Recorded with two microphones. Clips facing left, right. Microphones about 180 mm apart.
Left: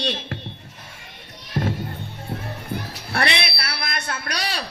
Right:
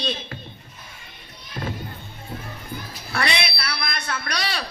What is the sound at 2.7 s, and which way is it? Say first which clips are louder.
Music: left 4 dB; 70° left (ahead or behind).